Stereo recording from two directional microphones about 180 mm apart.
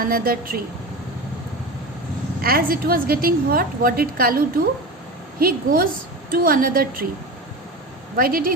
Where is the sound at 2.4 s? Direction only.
55° right (ahead or behind).